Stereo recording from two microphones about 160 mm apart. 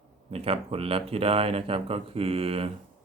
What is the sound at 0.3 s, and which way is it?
Speech, 35° right (ahead or behind).